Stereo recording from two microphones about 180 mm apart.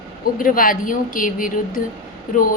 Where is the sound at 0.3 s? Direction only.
50° left (ahead or behind).